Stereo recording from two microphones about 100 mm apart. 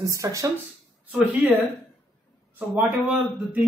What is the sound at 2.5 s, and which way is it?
Speech, 15° right (ahead or behind).